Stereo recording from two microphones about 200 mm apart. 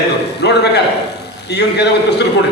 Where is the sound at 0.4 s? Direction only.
55° left (ahead or behind).